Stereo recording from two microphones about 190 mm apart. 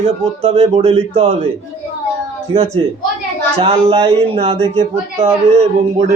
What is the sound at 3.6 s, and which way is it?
Speech, 30° right (ahead or behind).